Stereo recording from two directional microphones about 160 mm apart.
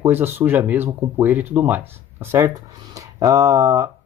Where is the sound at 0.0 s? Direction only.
15° right (ahead or behind).